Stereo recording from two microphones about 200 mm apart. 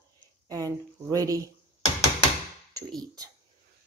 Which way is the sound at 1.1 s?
15° right (ahead or behind).